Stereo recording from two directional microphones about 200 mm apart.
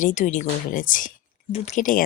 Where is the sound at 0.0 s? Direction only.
35° left (ahead or behind).